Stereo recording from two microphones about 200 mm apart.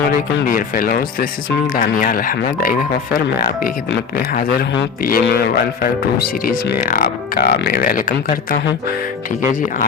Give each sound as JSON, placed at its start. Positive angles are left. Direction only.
{"t": 0.4, "sound": "speech", "side_deg": 45}
{"t": 5.0, "sound": "speech", "side_deg": 50}